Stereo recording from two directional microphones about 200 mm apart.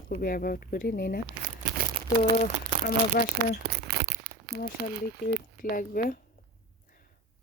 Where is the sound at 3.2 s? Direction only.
45° left (ahead or behind).